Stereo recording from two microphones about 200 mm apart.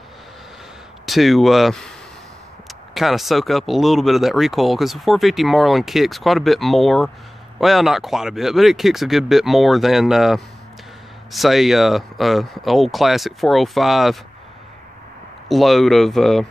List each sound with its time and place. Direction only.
1.0 s speech: centre (ahead or behind)
15.4 s speech: centre (ahead or behind)